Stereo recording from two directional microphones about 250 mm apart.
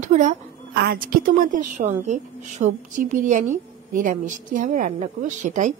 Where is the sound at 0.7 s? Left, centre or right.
Right.